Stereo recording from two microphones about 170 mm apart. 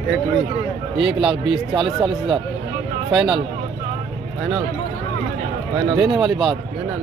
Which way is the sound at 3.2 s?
30° right (ahead or behind).